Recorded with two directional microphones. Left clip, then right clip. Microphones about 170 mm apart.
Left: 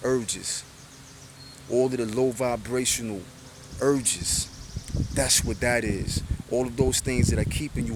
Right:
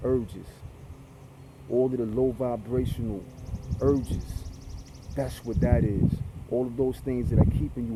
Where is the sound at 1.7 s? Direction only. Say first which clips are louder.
Left 1 dB; 40° left (ahead or behind).